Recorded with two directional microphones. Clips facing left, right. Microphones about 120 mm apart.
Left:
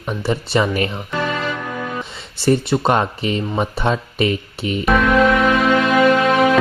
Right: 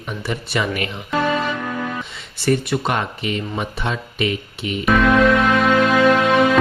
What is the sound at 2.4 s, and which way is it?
Speech, 30° left (ahead or behind).